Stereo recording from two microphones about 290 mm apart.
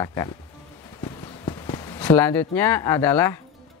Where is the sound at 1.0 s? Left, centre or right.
Centre.